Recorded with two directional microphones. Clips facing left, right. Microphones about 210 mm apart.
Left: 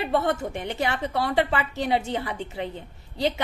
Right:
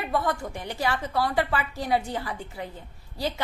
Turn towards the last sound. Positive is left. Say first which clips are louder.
# left 4 dB
turn(degrees=20)  # may be behind; listen again after turning